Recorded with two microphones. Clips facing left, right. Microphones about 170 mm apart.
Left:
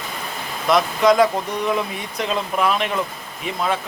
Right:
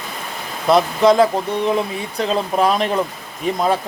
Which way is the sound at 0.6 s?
30° right (ahead or behind).